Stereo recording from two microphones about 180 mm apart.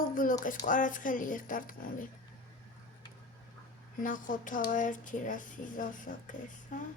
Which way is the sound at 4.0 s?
45° left (ahead or behind).